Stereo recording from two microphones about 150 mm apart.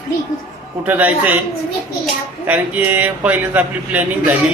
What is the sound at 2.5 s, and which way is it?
Speech, 10° right (ahead or behind).